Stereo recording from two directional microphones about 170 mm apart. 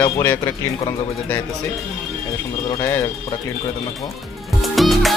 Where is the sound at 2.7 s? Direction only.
15° left (ahead or behind).